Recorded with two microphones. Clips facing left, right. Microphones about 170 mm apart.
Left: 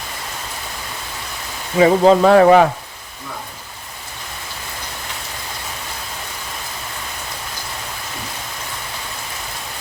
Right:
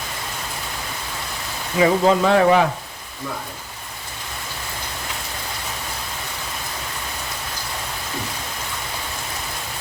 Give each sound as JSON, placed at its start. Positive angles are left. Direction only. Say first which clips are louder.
{"t": 1.8, "sound": "speech", "louder": "left 5 dB", "side_deg": 40}